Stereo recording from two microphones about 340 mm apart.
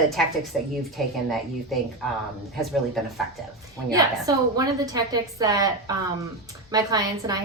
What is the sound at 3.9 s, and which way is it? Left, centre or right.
A woman's voice, centre.